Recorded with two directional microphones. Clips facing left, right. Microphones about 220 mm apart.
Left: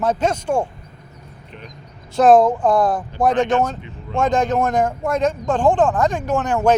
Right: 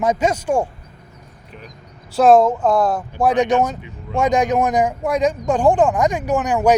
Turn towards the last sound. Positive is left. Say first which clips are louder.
# right 1 dB
turn(degrees=-5)  # may be behind; listen again after turning